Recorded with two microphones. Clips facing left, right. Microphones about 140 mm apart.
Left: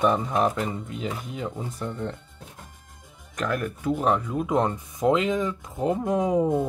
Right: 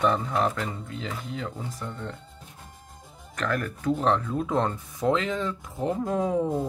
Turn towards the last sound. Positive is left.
turn(degrees=15)  # may be behind; listen again after turning